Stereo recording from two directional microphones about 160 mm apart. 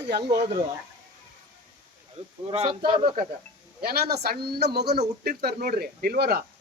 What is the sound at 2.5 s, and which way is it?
Speech, 35° right (ahead or behind).